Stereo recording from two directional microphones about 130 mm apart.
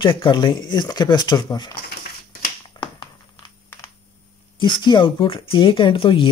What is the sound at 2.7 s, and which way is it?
Finger snapping, 40° left (ahead or behind).